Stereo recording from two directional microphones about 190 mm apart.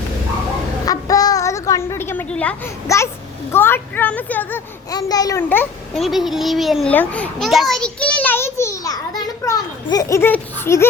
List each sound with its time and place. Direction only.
0.9 s a sound: 20° left (ahead or behind)
3.5 s a woman's voice: 10° left (ahead or behind)
4.9 s a child's voice: 20° left (ahead or behind)